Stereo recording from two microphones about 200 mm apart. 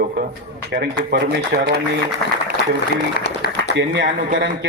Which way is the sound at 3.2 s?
55° left (ahead or behind).